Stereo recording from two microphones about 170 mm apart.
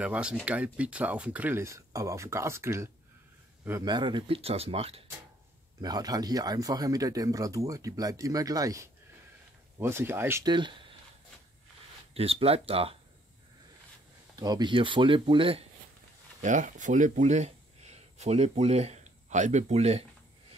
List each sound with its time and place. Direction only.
0.0 s speech: 5° right (ahead or behind)
3.8 s speech: 25° right (ahead or behind)
5.8 s speech: 25° right (ahead or behind)
10.4 s speech: 25° right (ahead or behind)
12.1 s speech: 35° right (ahead or behind)
14.3 s speech: 25° right (ahead or behind)
16.3 s speech: 45° right (ahead or behind)